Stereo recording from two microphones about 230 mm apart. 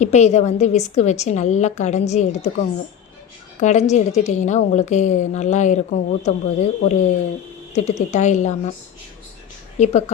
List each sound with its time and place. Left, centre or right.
0.0 s a woman's voice: left
9.7 s speech: left